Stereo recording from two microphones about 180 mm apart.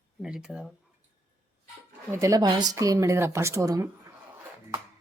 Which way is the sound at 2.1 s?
20° right (ahead or behind).